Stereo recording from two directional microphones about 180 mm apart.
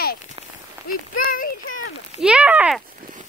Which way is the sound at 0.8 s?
50° left (ahead or behind).